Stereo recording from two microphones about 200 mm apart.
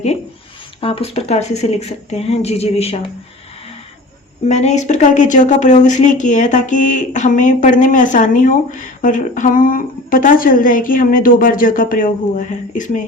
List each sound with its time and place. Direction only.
0.8 s speech: 25° left (ahead or behind)
4.4 s speech: 35° left (ahead or behind)